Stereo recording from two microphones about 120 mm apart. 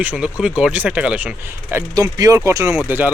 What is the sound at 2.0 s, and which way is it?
Speech, 30° right (ahead or behind).